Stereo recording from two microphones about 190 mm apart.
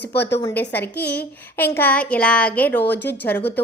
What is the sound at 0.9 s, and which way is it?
Speech, 60° left (ahead or behind).